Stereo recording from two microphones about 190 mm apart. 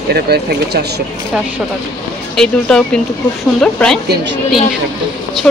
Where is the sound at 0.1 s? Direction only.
55° right (ahead or behind).